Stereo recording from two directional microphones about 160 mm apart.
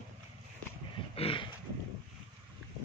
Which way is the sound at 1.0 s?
35° left (ahead or behind).